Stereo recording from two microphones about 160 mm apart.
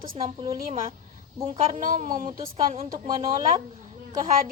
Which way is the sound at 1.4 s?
50° right (ahead or behind).